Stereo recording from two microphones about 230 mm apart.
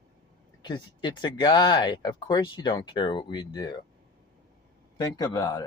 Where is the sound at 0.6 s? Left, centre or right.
Centre.